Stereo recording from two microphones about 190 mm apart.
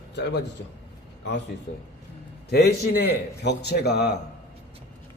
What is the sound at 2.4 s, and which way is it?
A man's voice, 60° left (ahead or behind).